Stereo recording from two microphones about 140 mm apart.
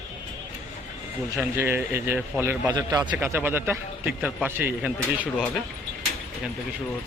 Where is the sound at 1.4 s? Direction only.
15° right (ahead or behind).